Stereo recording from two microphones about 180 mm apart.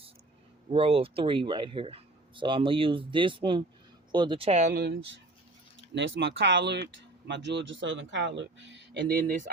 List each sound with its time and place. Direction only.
0.7 s speech: 30° right (ahead or behind)
4.7 s speech: 60° right (ahead or behind)
5.9 s speech: 75° right (ahead or behind); by 9.5 s 50° right (ahead or behind)